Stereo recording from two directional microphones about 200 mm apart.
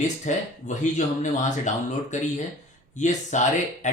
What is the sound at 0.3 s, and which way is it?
Speech, 40° left (ahead or behind).